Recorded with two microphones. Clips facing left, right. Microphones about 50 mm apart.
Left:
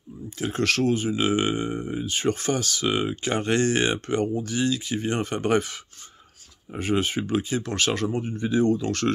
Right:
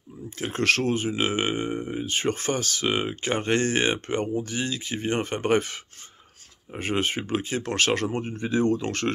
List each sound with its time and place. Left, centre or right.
0.4 s speech: right
2.0 s speech: right
6.8 s speech: right
8.4 s speech: right